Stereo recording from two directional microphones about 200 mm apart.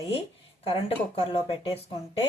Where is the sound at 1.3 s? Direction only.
25° left (ahead or behind).